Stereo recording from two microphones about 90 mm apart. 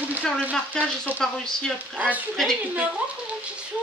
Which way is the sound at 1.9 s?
15° right (ahead or behind).